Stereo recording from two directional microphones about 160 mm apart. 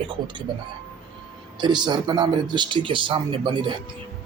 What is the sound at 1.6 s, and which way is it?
Speech, 30° right (ahead or behind).